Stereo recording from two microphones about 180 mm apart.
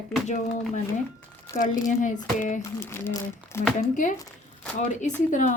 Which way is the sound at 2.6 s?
15° left (ahead or behind).